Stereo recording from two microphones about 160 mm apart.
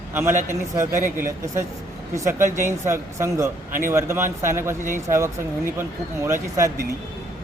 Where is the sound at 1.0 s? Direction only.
55° right (ahead or behind).